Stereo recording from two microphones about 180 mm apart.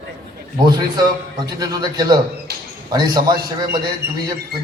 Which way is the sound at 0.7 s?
25° right (ahead or behind).